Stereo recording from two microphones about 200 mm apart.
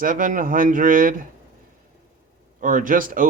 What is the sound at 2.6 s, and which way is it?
Speech, 40° right (ahead or behind).